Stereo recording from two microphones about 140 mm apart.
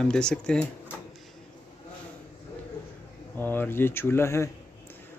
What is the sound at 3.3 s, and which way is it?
Speech, 15° left (ahead or behind).